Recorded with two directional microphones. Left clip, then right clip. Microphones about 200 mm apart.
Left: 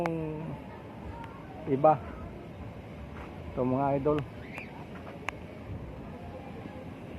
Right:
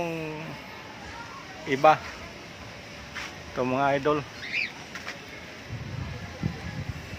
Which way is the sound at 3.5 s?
35° right (ahead or behind).